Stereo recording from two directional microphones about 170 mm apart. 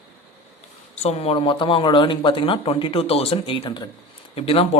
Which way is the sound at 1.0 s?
35° left (ahead or behind).